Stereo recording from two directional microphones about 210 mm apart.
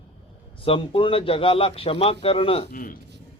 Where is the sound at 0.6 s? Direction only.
25° left (ahead or behind).